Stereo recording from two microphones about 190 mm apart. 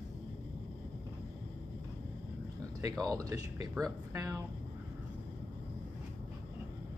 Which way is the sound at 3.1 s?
20° right (ahead or behind).